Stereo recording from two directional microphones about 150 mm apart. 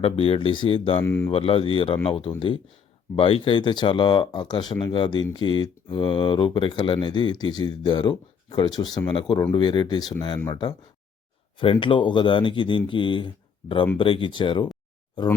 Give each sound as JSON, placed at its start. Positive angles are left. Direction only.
{"t": 0.0, "sound": "speech", "side_deg": 40}
{"t": 1.0, "sound": "speech", "side_deg": 15}
{"t": 1.3, "sound": "speech", "side_deg": 40}